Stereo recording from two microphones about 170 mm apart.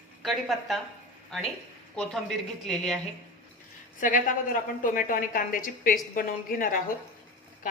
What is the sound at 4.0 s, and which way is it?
A woman's voice, 50° left (ahead or behind).